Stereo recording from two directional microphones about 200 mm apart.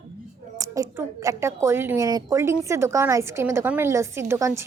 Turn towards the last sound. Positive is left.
turn(degrees=-15)  # may be behind; listen again after turning